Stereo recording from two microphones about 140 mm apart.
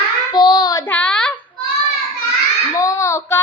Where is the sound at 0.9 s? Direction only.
10° left (ahead or behind).